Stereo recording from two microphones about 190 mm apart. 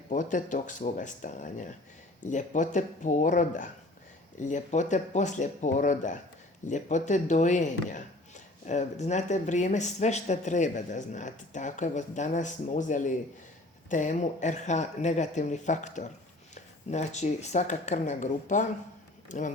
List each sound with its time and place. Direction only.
0.1 s speech: 40° left (ahead or behind)